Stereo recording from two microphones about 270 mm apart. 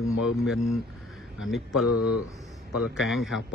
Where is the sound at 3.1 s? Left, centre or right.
Centre.